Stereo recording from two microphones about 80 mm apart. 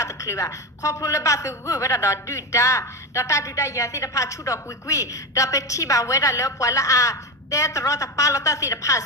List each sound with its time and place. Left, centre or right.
0.0 s a woman's voice: left